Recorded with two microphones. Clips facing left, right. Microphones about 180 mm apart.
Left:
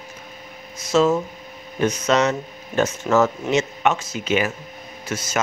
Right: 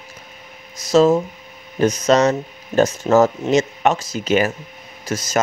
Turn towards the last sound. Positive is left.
turn(degrees=-40)  # may be behind; listen again after turning